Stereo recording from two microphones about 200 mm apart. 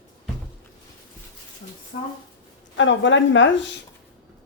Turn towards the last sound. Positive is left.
turn(degrees=65)  # may be behind; listen again after turning